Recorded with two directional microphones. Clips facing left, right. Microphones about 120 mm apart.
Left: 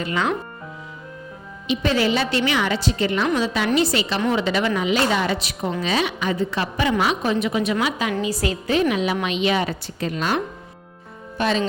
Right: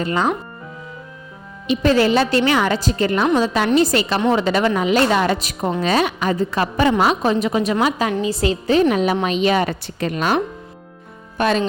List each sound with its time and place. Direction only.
0.0 s a woman's voice: 35° right (ahead or behind)
1.6 s a woman's voice: 40° right (ahead or behind)
8.2 s a woman's voice: 25° right (ahead or behind); by 11.6 s 50° right (ahead or behind)